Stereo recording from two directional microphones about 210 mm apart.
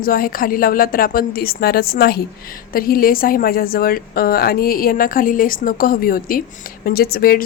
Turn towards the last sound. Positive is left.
turn(degrees=45)  # may be behind; listen again after turning